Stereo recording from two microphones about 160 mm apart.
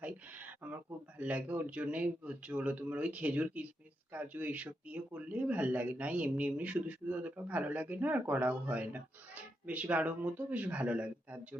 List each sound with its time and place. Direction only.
0.0 s speech: 10° right (ahead or behind)